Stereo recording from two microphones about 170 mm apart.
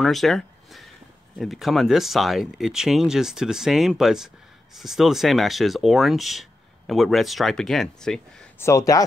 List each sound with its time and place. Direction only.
0.0 s speech: centre (ahead or behind)
8.5 s speech: 20° left (ahead or behind)